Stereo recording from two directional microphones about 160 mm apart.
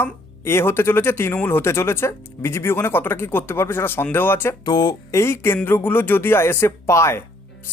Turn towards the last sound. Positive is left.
turn(degrees=15)  # may be behind; listen again after turning